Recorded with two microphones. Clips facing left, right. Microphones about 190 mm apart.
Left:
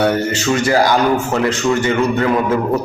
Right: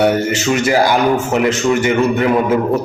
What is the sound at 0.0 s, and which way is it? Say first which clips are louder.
A man's voice: right 2 dB; 20° right (ahead or behind).